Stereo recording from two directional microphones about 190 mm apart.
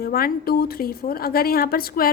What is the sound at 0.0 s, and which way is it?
A woman's voice, 50° left (ahead or behind).